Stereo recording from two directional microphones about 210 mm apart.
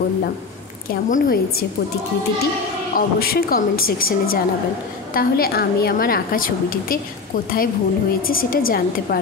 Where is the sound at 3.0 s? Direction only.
45° left (ahead or behind).